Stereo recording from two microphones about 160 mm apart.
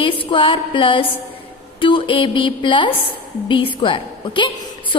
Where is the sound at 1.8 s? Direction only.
30° left (ahead or behind).